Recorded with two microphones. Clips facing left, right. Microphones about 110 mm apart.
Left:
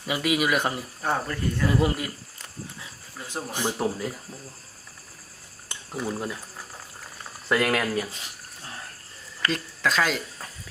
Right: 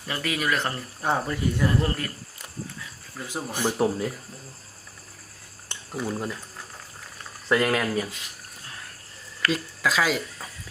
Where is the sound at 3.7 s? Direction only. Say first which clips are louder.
Right 3 dB; 5° right (ahead or behind).